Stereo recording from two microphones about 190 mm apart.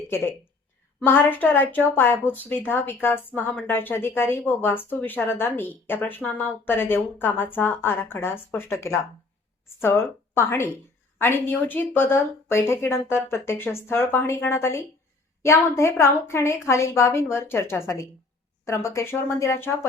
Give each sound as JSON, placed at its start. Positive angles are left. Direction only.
{"t": 0.9, "sound": "speech", "side_deg": 10}